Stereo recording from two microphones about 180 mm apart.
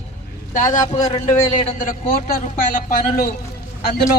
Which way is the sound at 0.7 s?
20° left (ahead or behind).